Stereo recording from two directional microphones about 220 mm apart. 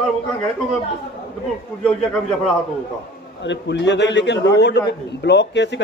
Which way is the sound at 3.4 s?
55° left (ahead or behind).